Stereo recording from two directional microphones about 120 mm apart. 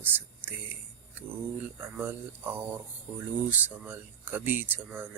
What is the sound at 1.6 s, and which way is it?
Speech, 15° right (ahead or behind).